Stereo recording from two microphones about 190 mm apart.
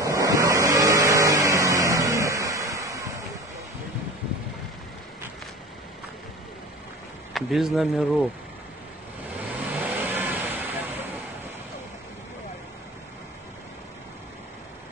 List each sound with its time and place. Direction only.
0.0 s vehicle: 15° right (ahead or behind)
7.3 s speech: centre (ahead or behind)
9.6 s vehicle: 10° right (ahead or behind)